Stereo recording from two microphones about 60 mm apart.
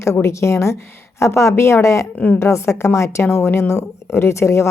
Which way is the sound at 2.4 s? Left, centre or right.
Left.